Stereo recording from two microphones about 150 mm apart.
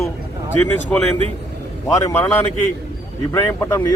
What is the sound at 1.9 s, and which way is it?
Speech, 20° left (ahead or behind).